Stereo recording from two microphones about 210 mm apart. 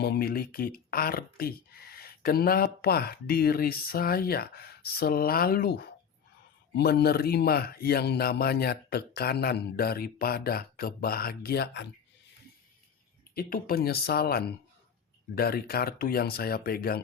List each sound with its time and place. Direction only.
0.0 s speech: 50° left (ahead or behind)
13.3 s speech: 45° left (ahead or behind)